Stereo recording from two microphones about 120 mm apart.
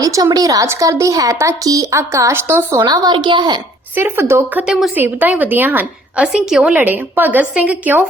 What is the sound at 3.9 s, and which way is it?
Speech, 20° right (ahead or behind).